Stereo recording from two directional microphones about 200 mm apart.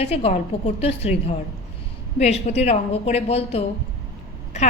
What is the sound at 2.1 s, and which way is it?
A woman's voice, 35° left (ahead or behind).